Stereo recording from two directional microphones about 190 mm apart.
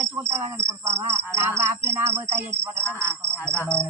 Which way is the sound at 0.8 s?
35° right (ahead or behind).